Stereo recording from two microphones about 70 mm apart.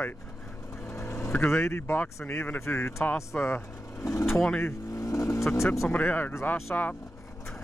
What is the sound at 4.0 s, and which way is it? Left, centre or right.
Speech, left.